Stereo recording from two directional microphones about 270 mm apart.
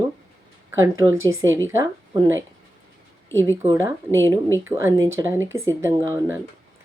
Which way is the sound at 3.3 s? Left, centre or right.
Centre.